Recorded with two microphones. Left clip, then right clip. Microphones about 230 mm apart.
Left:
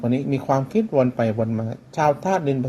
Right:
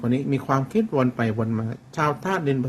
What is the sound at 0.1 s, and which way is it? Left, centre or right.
Speech, centre.